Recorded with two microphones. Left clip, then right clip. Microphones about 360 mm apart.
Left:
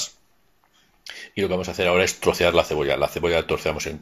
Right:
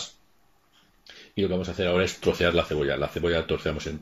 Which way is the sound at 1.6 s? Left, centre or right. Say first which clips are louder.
Left 7 dB; centre.